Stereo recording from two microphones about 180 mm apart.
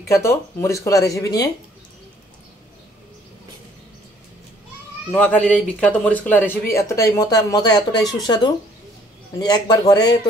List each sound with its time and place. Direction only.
0.1 s speech: 15° left (ahead or behind)
5.1 s speech: 5° left (ahead or behind)